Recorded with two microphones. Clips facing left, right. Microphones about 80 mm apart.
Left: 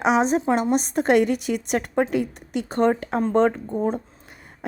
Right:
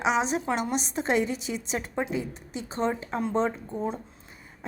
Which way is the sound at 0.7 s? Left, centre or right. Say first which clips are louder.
Left 9 dB; left.